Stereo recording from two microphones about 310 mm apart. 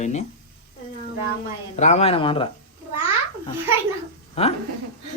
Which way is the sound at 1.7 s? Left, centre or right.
Left.